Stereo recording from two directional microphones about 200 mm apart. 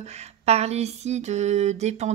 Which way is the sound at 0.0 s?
30° right (ahead or behind).